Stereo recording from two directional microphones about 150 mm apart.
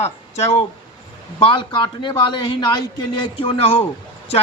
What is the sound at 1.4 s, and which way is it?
A man's voice, 35° left (ahead or behind).